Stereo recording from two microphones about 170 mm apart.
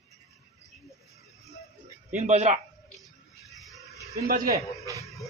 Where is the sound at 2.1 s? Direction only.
40° right (ahead or behind).